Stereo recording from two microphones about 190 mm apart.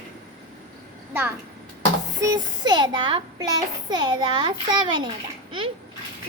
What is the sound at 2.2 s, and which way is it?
A child's voice, 20° right (ahead or behind).